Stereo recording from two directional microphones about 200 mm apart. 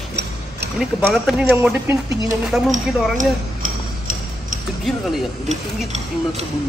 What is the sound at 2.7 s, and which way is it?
Tick-tock, 40° right (ahead or behind).